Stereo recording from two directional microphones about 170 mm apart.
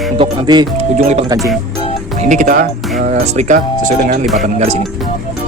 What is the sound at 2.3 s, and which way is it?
Speech, 50° right (ahead or behind).